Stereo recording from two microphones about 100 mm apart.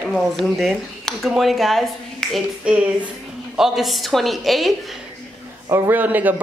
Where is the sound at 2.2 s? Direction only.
5° left (ahead or behind).